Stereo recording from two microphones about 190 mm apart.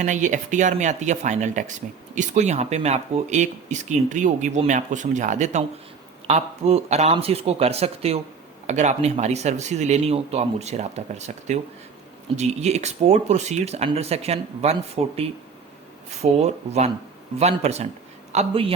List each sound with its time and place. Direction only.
0.0 s speech: 40° right (ahead or behind)
16.4 s a man's voice: 35° right (ahead or behind)